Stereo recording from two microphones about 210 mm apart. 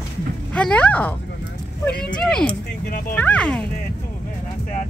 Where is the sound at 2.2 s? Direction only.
5° left (ahead or behind).